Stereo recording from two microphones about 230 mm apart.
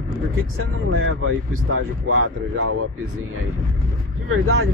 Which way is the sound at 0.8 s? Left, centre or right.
Right.